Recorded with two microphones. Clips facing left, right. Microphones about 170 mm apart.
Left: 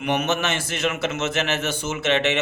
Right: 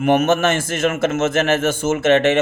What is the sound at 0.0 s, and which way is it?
A man's voice, 45° right (ahead or behind).